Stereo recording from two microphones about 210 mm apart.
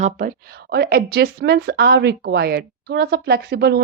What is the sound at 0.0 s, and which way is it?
Speech, 40° right (ahead or behind).